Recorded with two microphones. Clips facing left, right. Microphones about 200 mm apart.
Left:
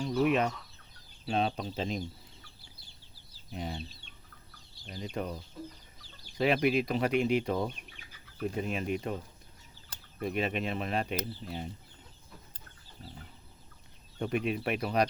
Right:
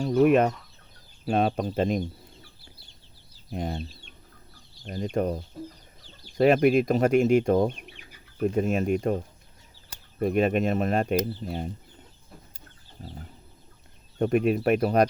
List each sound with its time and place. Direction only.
0.0 s chicken: 50° right (ahead or behind)
1.2 s speech: 55° right (ahead or behind)
3.5 s speech: 50° right (ahead or behind)
4.9 s speech: 50° right (ahead or behind)
14.2 s speech: 50° right (ahead or behind)